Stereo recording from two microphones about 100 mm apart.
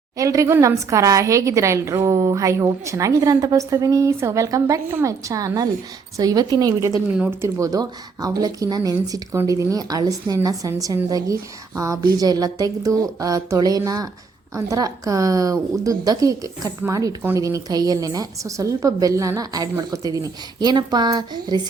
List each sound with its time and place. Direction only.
0.2 s a woman's voice: 35° right (ahead or behind)